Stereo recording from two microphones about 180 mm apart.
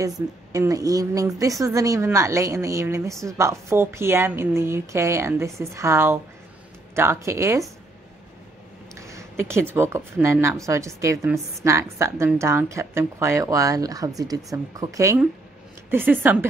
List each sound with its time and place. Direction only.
0.0 s a woman's voice: 20° right (ahead or behind)
9.0 s a sound: 15° right (ahead or behind)
9.8 s a woman's voice: 15° right (ahead or behind)